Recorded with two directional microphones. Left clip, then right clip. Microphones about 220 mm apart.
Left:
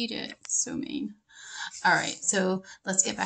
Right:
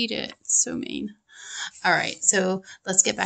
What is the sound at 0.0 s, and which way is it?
Speech, 35° right (ahead or behind).